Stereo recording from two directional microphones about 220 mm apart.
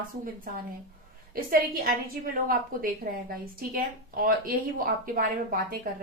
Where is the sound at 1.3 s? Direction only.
40° right (ahead or behind).